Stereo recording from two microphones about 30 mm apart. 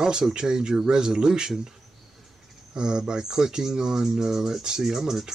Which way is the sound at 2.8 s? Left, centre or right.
Right.